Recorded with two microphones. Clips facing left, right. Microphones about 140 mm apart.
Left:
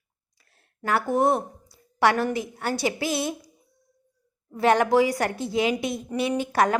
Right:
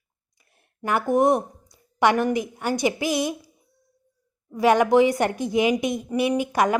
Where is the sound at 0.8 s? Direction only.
15° right (ahead or behind).